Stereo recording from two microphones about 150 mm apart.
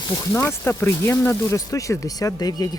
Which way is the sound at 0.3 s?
15° left (ahead or behind).